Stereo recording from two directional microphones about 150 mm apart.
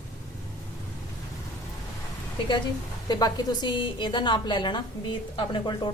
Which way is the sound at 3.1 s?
25° left (ahead or behind).